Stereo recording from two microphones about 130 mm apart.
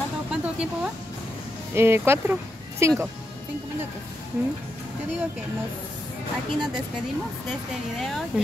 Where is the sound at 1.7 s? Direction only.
20° right (ahead or behind).